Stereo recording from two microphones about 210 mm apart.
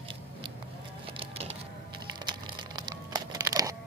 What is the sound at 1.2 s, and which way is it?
Music, 30° right (ahead or behind).